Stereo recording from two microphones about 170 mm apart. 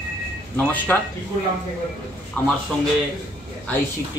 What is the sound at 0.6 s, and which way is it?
Speech, 10° left (ahead or behind).